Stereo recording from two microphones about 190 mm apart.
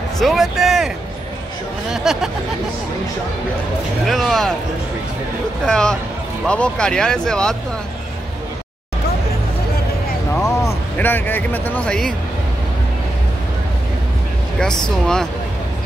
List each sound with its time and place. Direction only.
0.2 s speech: centre (ahead or behind)
4.1 s speech: centre (ahead or behind)
5.7 s speech: 5° left (ahead or behind)
10.4 s speech: 15° left (ahead or behind)